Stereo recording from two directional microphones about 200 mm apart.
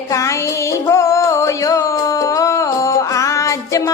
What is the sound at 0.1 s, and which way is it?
Music, 15° left (ahead or behind).